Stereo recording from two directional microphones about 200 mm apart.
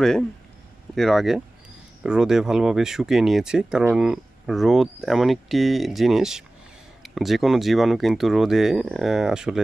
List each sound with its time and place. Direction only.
0.9 s speech: centre (ahead or behind)